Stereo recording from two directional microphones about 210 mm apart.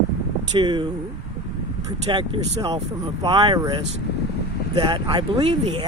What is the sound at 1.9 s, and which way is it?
Speech, 20° right (ahead or behind).